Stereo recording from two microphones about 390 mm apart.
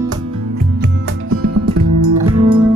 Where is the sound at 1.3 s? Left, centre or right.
Right.